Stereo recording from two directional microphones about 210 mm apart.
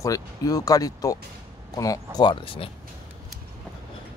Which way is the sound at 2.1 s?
25° left (ahead or behind).